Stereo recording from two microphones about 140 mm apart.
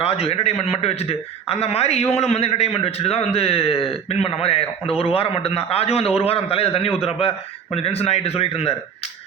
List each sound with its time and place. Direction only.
0.0 s a man's voice: 45° left (ahead or behind)